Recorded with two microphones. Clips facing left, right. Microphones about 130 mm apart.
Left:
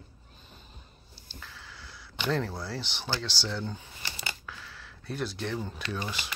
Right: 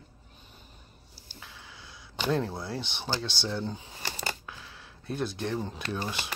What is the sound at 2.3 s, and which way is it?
Speech, 20° right (ahead or behind).